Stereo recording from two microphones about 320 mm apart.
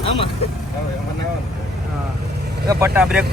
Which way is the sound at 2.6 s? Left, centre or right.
Centre.